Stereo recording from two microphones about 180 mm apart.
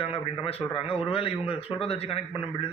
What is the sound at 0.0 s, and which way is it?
A man's voice, 30° left (ahead or behind).